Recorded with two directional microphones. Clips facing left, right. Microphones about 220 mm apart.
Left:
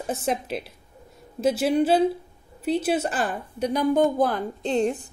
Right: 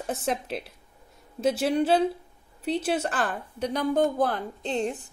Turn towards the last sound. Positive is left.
turn(degrees=15)  # may be behind; listen again after turning